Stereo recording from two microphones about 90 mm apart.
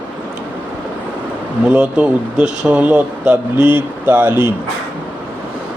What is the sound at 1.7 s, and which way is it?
Speech, 15° right (ahead or behind).